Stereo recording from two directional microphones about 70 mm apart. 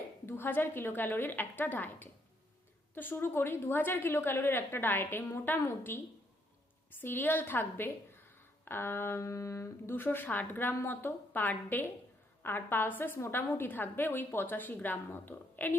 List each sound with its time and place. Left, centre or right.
0.3 s a woman's voice: left